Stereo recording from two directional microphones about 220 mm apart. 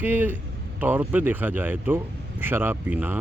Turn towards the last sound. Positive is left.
turn(degrees=-10)  # may be behind; listen again after turning